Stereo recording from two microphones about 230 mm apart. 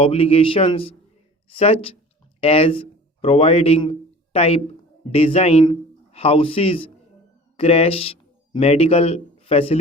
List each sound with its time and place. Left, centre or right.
0.0 s a man's voice: left